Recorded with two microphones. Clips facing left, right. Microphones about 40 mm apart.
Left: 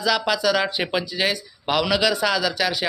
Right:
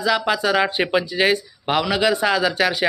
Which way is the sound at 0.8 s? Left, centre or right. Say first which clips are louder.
Right 5 dB; centre.